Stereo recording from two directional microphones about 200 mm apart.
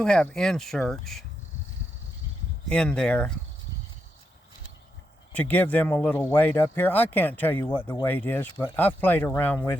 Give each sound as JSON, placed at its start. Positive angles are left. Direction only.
{"t": 0.0, "sound": "speech", "side_deg": 5}
{"t": 2.6, "sound": "speech", "side_deg": 5}
{"t": 5.3, "sound": "speech", "side_deg": 10}
{"t": 7.7, "sound": "speech", "side_deg": 25}
{"t": 8.0, "sound": "speech", "side_deg": 10}